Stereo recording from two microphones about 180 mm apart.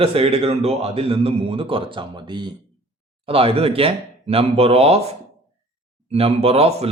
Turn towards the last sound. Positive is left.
turn(degrees=-35)  # may be behind; listen again after turning